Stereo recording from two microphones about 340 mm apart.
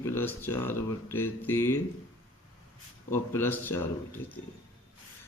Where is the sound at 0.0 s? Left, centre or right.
Centre.